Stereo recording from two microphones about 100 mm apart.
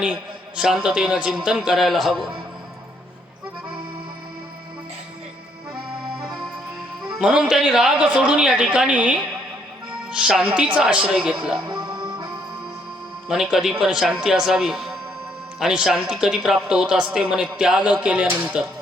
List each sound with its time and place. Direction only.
0.0 s a man's voice: 10° right (ahead or behind)
7.2 s speech: 5° right (ahead or behind)
11.7 s music: 50° right (ahead or behind)
13.2 s a man's voice: 5° right (ahead or behind)